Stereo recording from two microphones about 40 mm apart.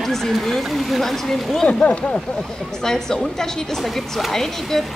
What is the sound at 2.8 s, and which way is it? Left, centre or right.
A woman's voice, centre.